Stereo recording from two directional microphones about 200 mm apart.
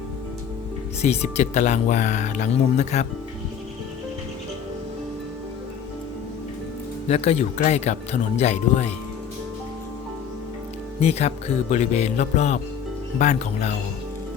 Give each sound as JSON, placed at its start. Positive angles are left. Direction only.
{"t": 1.0, "sound": "speech", "side_deg": 35}
{"t": 7.1, "sound": "speech", "side_deg": 30}
{"t": 11.0, "sound": "speech", "side_deg": 30}